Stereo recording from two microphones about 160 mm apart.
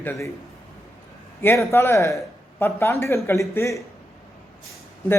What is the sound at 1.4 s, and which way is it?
Speech, 15° left (ahead or behind).